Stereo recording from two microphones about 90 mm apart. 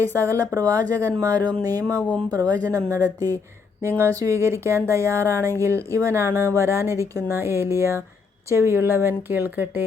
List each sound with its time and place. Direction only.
0.0 s speech: 35° right (ahead or behind)
2.0 s speech: 15° left (ahead or behind)
2.7 s speech: 40° right (ahead or behind)
3.8 s speech: 25° right (ahead or behind)